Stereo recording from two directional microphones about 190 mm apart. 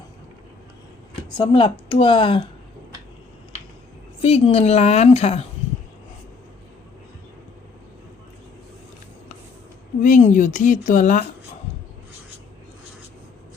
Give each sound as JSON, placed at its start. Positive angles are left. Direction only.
{"t": 1.4, "sound": "speech", "side_deg": 25}
{"t": 4.2, "sound": "a woman's voice", "side_deg": 30}
{"t": 10.0, "sound": "a woman's voice", "side_deg": 40}